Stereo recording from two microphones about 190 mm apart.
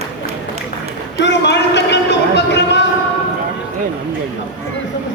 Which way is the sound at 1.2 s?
65° left (ahead or behind).